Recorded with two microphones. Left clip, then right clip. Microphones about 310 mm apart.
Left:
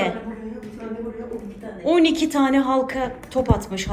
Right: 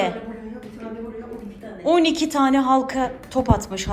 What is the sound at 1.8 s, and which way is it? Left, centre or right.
A woman's voice, centre.